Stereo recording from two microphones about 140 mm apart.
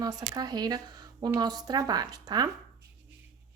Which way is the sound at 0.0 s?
25° right (ahead or behind).